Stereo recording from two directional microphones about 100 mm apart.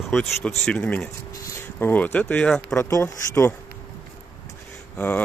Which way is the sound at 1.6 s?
20° left (ahead or behind).